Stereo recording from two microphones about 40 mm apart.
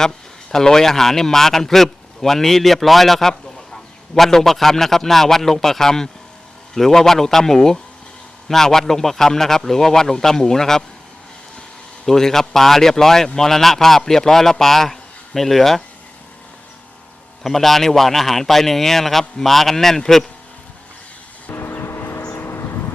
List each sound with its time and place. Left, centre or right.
0.5 s a man's voice: centre
12.0 s speech: centre
17.4 s speech: centre
21.5 s vehicle: left
22.3 s a sound: left